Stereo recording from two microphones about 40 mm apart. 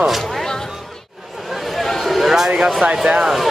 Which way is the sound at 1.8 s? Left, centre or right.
Centre.